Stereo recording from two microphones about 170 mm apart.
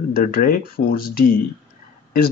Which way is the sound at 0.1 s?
60° left (ahead or behind).